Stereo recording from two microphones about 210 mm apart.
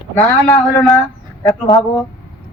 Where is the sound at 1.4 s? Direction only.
20° left (ahead or behind).